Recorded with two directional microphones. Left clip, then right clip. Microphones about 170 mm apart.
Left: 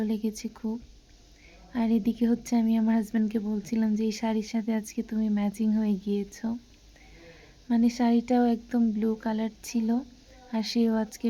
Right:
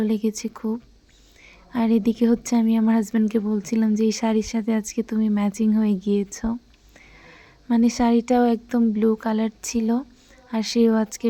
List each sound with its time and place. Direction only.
0.0 s speech: 30° right (ahead or behind)